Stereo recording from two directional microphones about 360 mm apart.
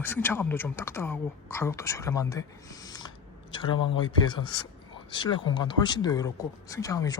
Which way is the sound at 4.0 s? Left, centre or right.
Centre.